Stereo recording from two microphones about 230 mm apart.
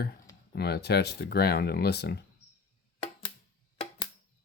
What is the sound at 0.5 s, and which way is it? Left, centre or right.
Speech, left.